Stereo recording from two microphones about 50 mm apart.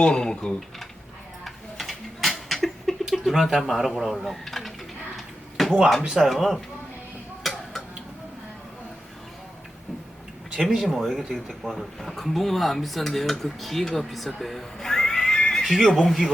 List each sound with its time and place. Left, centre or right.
0.0 s speech: centre
1.5 s a sound: centre
6.1 s speech: centre
7.4 s tick-tock: centre
10.7 s speech: centre
15.6 s speech: centre